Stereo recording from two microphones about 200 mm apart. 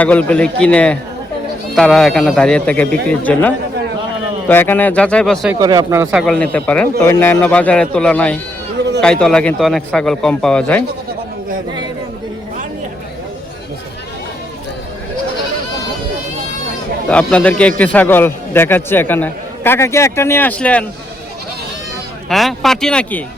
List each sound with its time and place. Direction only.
0.0 s a man's voice: 5° left (ahead or behind)
5.5 s speech: 20° right (ahead or behind)
6.1 s a man's voice: 5° left (ahead or behind)
17.1 s a man's voice: 5° left (ahead or behind)
22.3 s a man's voice: centre (ahead or behind)